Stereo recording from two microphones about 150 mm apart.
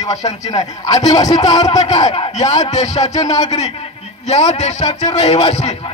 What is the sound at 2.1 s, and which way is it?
A man's voice, 45° left (ahead or behind).